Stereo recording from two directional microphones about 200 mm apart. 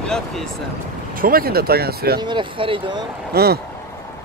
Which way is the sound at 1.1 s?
45° right (ahead or behind).